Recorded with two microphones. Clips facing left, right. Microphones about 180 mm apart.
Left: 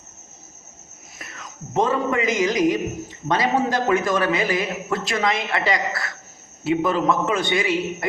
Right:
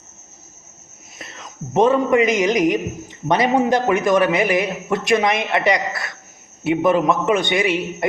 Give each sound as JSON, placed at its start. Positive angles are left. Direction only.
{"t": 1.2, "sound": "a man's voice", "side_deg": -25}